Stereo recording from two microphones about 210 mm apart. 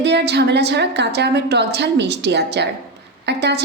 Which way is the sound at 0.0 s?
55° right (ahead or behind).